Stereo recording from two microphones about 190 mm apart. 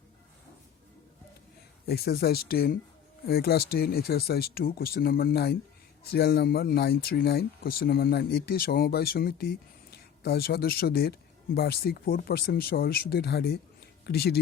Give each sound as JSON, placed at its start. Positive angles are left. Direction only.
{"t": 1.9, "sound": "speech", "side_deg": 55}